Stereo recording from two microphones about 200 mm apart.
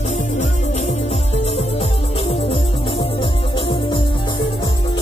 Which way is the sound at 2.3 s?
30° left (ahead or behind).